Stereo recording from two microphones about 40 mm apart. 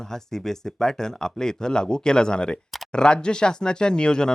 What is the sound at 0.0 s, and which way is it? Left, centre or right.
Speech, centre.